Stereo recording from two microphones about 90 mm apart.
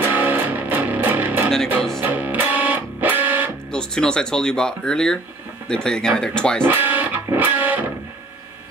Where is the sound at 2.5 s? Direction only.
20° right (ahead or behind).